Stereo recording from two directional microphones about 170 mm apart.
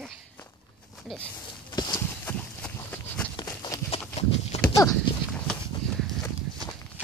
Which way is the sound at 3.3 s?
25° left (ahead or behind).